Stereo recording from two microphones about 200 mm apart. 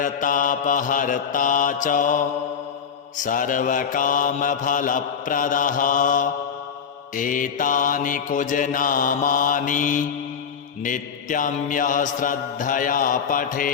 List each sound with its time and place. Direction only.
0.0 s mantra: 40° left (ahead or behind)
3.2 s mantra: 40° left (ahead or behind)